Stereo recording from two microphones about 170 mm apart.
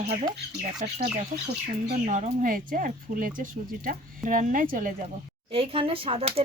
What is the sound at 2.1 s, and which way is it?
Speech, 45° right (ahead or behind).